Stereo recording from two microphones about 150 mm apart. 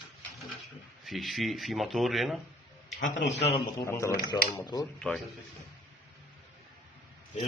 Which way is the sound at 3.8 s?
20° left (ahead or behind).